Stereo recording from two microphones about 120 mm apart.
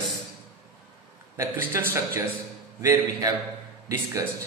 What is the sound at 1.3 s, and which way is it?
Speech, 20° right (ahead or behind).